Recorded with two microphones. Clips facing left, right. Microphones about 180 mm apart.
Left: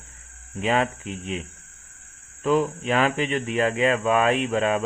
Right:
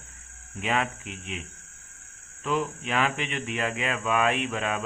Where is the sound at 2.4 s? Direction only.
35° left (ahead or behind).